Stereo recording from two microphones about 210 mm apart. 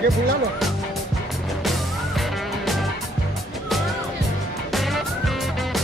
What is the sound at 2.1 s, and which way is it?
Music, centre (ahead or behind).